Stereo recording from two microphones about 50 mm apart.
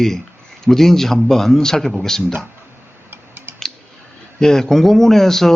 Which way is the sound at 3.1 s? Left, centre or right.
Right.